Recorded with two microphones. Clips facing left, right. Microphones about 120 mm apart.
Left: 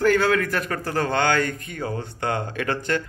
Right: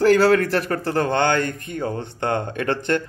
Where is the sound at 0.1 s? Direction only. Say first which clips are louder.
Right 5 dB; 35° right (ahead or behind).